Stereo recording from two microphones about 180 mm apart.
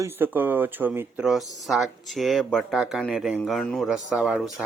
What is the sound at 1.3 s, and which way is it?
Speech, centre (ahead or behind).